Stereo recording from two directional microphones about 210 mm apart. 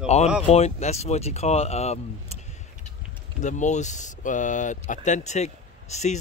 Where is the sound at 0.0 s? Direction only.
30° left (ahead or behind).